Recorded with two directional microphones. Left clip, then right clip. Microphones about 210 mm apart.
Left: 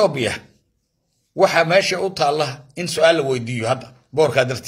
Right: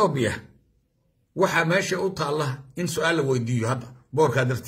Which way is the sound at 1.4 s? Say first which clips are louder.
Left 7 dB; 20° right (ahead or behind).